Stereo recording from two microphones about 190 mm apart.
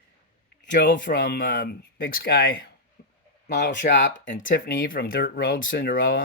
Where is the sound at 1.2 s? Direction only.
50° left (ahead or behind); by 4.6 s 75° left (ahead or behind).